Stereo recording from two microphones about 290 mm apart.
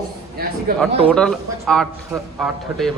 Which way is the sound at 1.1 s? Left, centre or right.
Centre.